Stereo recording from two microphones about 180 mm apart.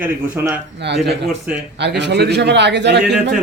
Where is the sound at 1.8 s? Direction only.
70° right (ahead or behind).